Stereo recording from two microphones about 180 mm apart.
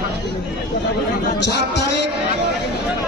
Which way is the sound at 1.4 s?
65° left (ahead or behind).